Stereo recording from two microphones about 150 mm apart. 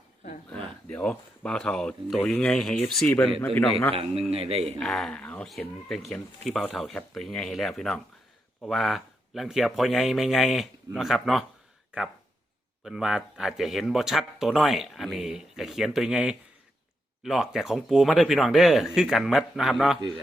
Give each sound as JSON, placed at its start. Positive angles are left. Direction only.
{"t": 0.9, "sound": "speech", "side_deg": 5}
{"t": 3.9, "sound": "a man's voice", "side_deg": -40}
{"t": 4.8, "sound": "speech", "side_deg": 0}
{"t": 12.8, "sound": "speech", "side_deg": -5}